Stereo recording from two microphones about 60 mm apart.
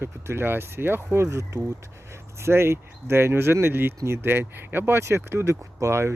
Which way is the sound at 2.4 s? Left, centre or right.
Right.